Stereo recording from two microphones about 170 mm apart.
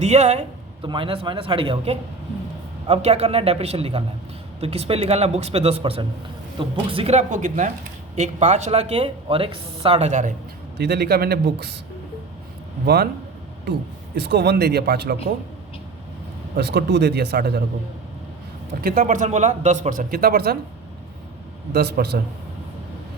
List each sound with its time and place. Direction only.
0.0 s speech: 40° right (ahead or behind)
10.8 s speech: 70° right (ahead or behind)
12.8 s speech: 70° right (ahead or behind)
14.2 s speech: 75° right (ahead or behind)
16.6 s speech: 80° right
18.8 s speech: 60° right (ahead or behind)
21.7 s speech: 70° right (ahead or behind)